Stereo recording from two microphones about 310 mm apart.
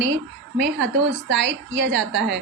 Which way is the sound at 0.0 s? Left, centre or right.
Right.